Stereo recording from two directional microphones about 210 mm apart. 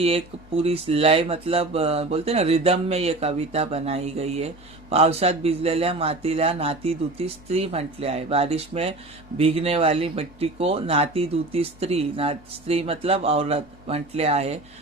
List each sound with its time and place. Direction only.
0.0 s speech: 30° right (ahead or behind)